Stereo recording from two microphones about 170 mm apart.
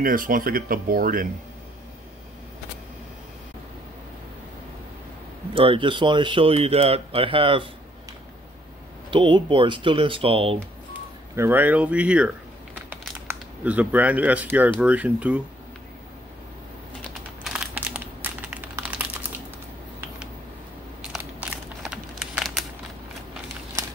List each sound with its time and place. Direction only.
0.0 s speech: 55° right (ahead or behind)
5.5 s speech: 30° right (ahead or behind)
9.1 s speech: 30° right (ahead or behind)
10.9 s speech: 10° right (ahead or behind)
13.3 s speech: 10° right (ahead or behind)
17.4 s crumpling: 5° right (ahead or behind)
21.0 s crumpling: 5° right (ahead or behind)